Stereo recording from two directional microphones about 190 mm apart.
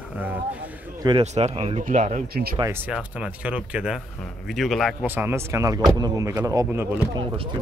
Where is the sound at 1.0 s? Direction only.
30° right (ahead or behind).